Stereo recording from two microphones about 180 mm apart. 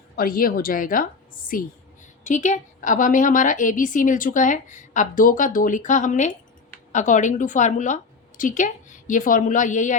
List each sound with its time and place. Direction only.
0.2 s a woman's voice: 55° left (ahead or behind)